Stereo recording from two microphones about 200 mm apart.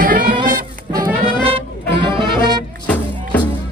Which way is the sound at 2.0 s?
25° right (ahead or behind).